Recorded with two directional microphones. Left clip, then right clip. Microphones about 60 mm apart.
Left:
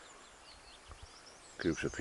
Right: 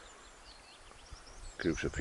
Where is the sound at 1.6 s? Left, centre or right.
Centre.